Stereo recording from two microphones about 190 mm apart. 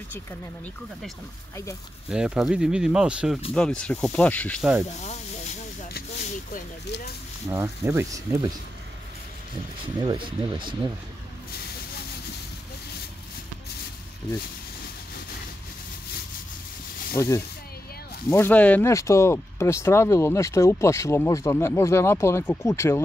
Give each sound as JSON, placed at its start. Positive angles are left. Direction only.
{"t": 2.0, "sound": "speech", "side_deg": -5}
{"t": 7.4, "sound": "speech", "side_deg": -10}
{"t": 9.9, "sound": "speech", "side_deg": -25}
{"t": 17.2, "sound": "speech", "side_deg": 15}